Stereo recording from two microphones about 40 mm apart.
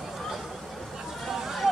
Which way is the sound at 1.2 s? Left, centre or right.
Centre.